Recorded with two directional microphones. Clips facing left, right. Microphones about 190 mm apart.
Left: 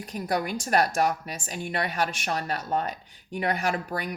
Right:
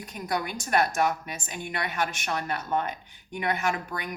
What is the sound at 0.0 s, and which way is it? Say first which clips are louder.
Speech: left 3 dB; 35° left (ahead or behind).